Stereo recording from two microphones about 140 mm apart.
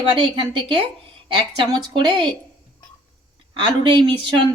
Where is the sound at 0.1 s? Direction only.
35° right (ahead or behind).